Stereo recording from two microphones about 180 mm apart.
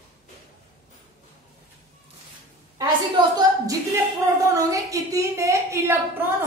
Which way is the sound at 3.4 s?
20° right (ahead or behind).